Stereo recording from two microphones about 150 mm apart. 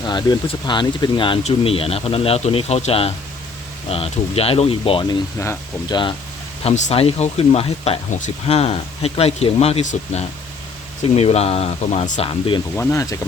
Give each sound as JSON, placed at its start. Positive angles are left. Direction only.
{"t": 0.0, "sound": "speech", "side_deg": 30}
{"t": 5.4, "sound": "speech", "side_deg": 20}
{"t": 6.6, "sound": "speech", "side_deg": 45}
{"t": 12.2, "sound": "speech", "side_deg": 35}
{"t": 12.7, "sound": "speech", "side_deg": 20}